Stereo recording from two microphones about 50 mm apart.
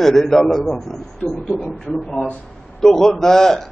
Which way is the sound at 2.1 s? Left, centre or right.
Centre.